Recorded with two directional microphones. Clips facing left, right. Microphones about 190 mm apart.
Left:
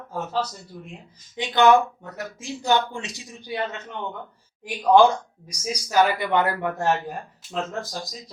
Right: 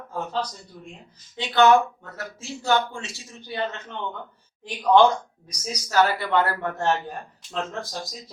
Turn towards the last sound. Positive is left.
turn(degrees=5)  # may be behind; listen again after turning